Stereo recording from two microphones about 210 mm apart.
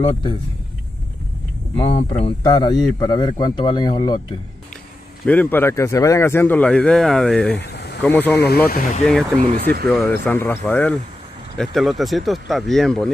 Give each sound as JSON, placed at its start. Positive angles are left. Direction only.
{"t": 0.0, "sound": "a man's voice", "side_deg": 25}
{"t": 2.0, "sound": "a man's voice", "side_deg": 25}
{"t": 5.2, "sound": "speech", "side_deg": 5}
{"t": 7.5, "sound": "vehicle", "side_deg": 50}
{"t": 8.0, "sound": "speech", "side_deg": 5}
{"t": 8.4, "sound": "speech", "side_deg": 45}
{"t": 9.4, "sound": "speech", "side_deg": -35}
{"t": 9.8, "sound": "speech", "side_deg": 10}